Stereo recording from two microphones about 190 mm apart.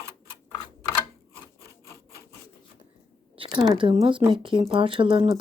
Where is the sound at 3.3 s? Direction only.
25° right (ahead or behind).